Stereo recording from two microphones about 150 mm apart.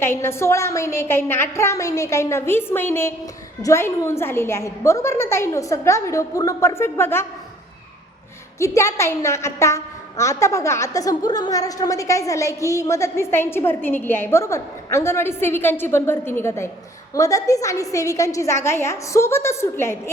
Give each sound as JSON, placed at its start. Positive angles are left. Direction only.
{"t": 0.0, "sound": "a woman's voice", "side_deg": 15}
{"t": 8.5, "sound": "a woman's voice", "side_deg": 20}